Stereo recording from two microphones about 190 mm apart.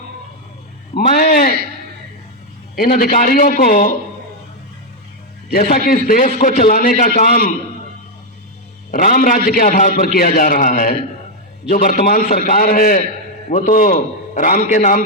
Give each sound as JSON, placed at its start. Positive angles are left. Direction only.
{"t": 0.9, "sound": "a man's voice", "side_deg": 50}
{"t": 2.7, "sound": "a man's voice", "side_deg": 50}
{"t": 5.5, "sound": "a man's voice", "side_deg": 50}
{"t": 8.9, "sound": "a man's voice", "side_deg": 45}